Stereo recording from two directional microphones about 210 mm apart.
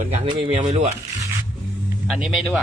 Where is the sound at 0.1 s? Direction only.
30° right (ahead or behind).